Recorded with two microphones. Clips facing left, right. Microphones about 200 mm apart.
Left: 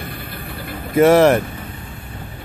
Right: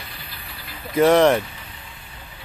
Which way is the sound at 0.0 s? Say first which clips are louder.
Left 10 dB; 55° left (ahead or behind).